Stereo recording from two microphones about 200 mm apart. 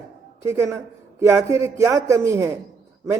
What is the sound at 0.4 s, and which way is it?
A man's voice, 15° right (ahead or behind).